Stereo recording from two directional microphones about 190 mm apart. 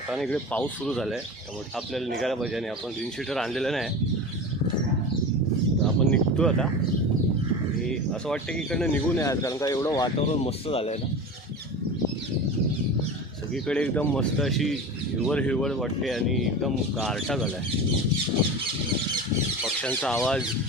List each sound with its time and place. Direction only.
0.1 s speech: 5° left (ahead or behind)
6.1 s a sound: 5° left (ahead or behind)
7.9 s speech: 5° left (ahead or behind)
10.2 s speech: 30° left (ahead or behind)
13.5 s speech: 5° left (ahead or behind)
19.6 s speech: 5° left (ahead or behind)